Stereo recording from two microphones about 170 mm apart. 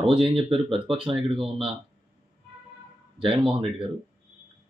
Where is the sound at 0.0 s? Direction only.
30° right (ahead or behind).